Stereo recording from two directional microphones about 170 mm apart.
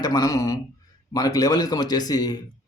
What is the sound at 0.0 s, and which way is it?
A man's voice, 20° left (ahead or behind).